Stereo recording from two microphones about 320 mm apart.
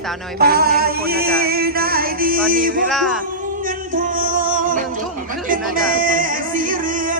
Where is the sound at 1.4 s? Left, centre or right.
Right.